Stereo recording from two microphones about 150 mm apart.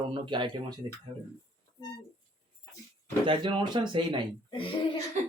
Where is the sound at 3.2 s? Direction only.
35° right (ahead or behind).